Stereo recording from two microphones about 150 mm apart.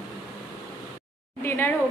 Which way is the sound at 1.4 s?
15° left (ahead or behind).